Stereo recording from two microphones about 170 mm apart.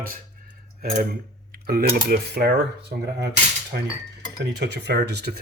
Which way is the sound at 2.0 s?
70° right (ahead or behind).